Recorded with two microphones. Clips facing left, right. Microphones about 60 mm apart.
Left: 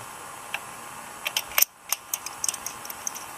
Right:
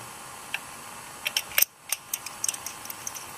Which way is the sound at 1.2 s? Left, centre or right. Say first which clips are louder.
Left 1 dB; centre.